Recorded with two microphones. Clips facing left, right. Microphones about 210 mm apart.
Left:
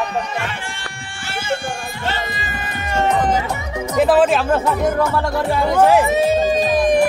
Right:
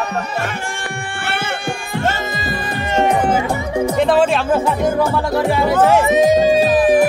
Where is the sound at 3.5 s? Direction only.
30° right (ahead or behind).